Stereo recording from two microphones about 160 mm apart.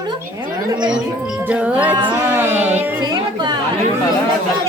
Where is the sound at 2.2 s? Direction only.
15° right (ahead or behind).